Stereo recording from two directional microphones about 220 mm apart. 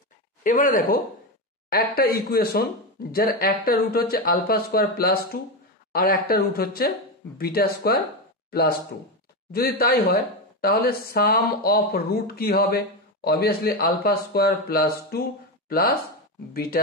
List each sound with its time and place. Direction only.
0.4 s speech: 35° left (ahead or behind)